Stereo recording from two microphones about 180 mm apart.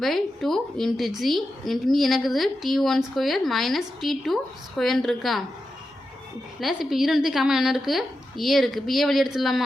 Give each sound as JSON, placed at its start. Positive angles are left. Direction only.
{"t": 0.0, "sound": "a woman's voice", "side_deg": 0}
{"t": 6.6, "sound": "a woman's voice", "side_deg": 0}